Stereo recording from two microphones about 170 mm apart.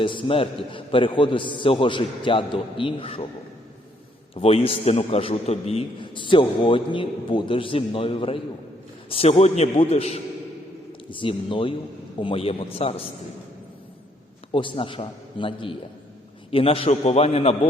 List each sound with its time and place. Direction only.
0.0 s a man's voice: 30° left (ahead or behind)
4.4 s a man's voice: 35° left (ahead or behind)
14.5 s a man's voice: 30° left (ahead or behind)